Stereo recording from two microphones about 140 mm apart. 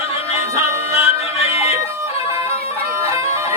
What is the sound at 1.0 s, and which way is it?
Music, 45° left (ahead or behind).